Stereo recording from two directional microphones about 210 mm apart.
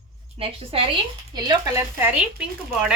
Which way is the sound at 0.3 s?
25° right (ahead or behind).